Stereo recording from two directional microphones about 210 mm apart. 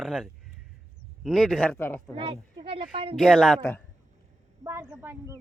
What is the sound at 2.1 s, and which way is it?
A woman's voice, 25° right (ahead or behind).